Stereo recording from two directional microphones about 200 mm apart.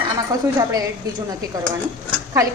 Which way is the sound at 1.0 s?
20° right (ahead or behind).